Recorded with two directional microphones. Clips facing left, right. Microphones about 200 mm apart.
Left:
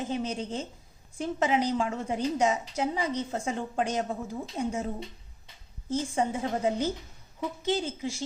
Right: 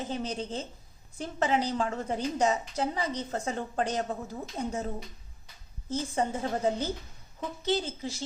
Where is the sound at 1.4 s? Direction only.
10° left (ahead or behind).